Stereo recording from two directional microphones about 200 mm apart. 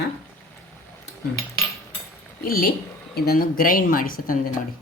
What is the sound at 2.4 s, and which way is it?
Speech, 45° left (ahead or behind).